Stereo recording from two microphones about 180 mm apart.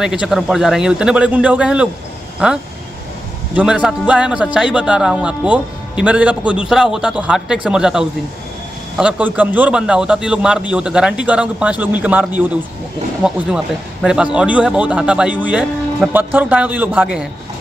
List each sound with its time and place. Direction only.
0.0 s a man's voice: 5° right (ahead or behind)
3.5 s a man's voice: 5° right (ahead or behind)